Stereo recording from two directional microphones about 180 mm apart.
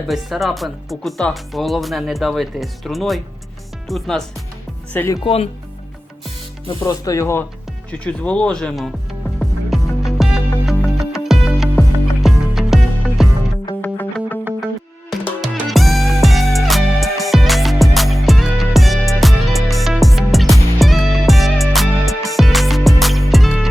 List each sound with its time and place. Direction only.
0.1 s speech: centre (ahead or behind)
4.9 s speech: 15° left (ahead or behind)
5.2 s speech: 35° left (ahead or behind)
6.7 s speech: 25° left (ahead or behind); by 8.9 s 5° left (ahead or behind)
9.4 s music: centre (ahead or behind)
13.8 s music: 10° left (ahead or behind)